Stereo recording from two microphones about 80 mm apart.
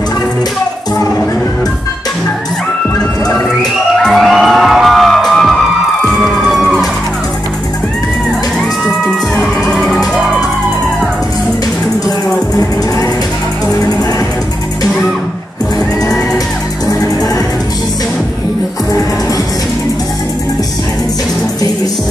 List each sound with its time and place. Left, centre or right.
3.9 s music: centre